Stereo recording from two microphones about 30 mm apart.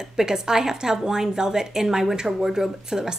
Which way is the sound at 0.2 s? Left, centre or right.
Centre.